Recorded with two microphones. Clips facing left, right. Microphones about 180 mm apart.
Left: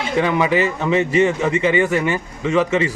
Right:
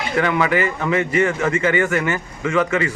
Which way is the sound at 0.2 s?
20° left (ahead or behind).